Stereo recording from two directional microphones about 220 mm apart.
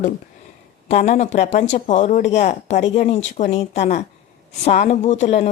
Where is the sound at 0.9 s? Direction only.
30° left (ahead or behind).